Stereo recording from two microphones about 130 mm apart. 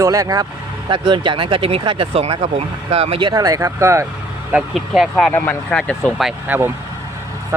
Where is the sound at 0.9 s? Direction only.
40° right (ahead or behind); by 4.0 s 20° right (ahead or behind).